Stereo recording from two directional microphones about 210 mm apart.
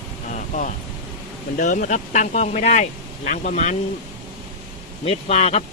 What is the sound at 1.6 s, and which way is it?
Speech, 40° left (ahead or behind).